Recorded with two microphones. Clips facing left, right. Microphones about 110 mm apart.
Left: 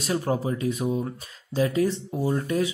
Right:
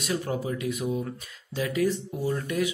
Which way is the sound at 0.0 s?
35° left (ahead or behind).